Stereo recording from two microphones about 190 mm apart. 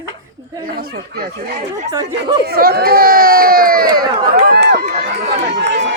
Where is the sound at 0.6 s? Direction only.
55° right (ahead or behind).